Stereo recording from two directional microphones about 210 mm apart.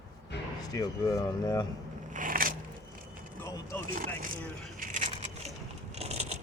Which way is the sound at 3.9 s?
40° right (ahead or behind).